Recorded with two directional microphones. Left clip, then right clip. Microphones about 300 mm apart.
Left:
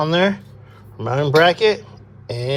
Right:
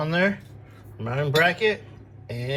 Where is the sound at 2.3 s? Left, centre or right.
Centre.